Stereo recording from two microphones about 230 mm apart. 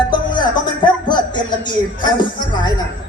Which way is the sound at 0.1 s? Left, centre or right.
Centre.